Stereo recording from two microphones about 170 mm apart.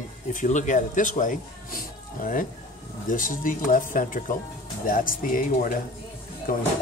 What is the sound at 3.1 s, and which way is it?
Speech, 55° left (ahead or behind).